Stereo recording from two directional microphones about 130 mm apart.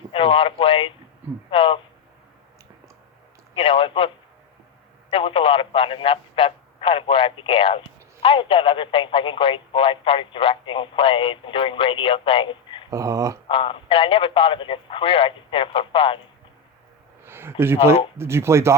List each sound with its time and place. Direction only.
0.1 s speech: 45° left (ahead or behind)
3.5 s speech: 45° left (ahead or behind)
5.1 s speech: 45° left (ahead or behind)
12.9 s speech: 25° right (ahead or behind)
13.5 s speech: 40° left (ahead or behind)
17.2 s speech: 20° right (ahead or behind)